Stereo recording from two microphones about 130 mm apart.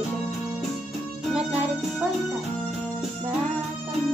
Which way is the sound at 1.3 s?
5° right (ahead or behind).